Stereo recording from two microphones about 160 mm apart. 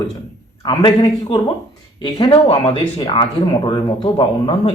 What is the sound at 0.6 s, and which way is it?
Speech, 30° left (ahead or behind).